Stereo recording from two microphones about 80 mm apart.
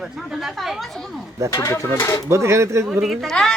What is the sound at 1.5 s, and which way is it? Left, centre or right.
Speech, left.